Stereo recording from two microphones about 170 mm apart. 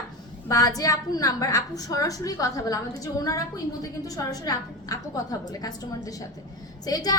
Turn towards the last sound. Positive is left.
turn(degrees=20)  # may be behind; listen again after turning